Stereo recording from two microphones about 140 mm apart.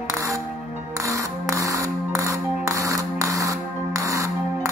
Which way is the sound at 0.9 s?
20° right (ahead or behind).